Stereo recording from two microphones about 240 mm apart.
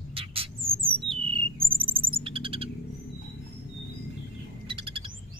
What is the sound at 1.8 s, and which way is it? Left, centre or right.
Bird, right.